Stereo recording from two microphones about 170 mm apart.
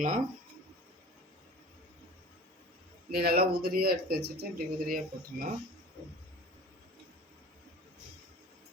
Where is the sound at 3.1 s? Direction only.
65° right (ahead or behind).